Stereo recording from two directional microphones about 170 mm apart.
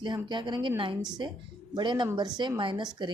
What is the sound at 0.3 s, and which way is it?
Speech, 25° right (ahead or behind).